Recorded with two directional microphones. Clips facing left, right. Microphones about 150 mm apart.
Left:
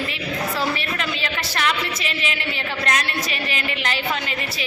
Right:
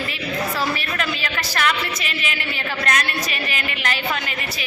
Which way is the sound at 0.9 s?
25° left (ahead or behind).